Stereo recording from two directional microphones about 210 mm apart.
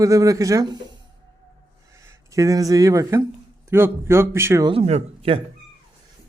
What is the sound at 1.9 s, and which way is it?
A man's voice, 15° right (ahead or behind).